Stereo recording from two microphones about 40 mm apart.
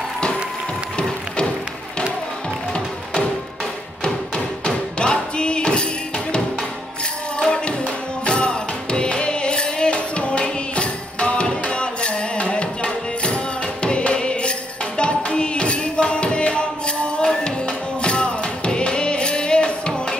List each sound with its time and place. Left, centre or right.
0.9 s music: left
4.6 s music: left
17.2 s music: centre